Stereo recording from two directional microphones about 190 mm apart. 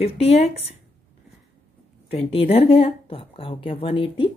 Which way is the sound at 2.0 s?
30° left (ahead or behind).